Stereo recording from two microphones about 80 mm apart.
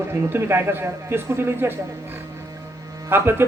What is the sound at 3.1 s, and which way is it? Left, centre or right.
Speech, right.